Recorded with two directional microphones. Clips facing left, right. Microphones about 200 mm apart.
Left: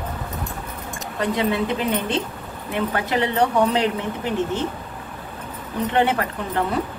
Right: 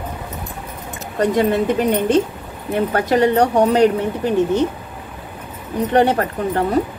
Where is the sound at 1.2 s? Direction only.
45° right (ahead or behind).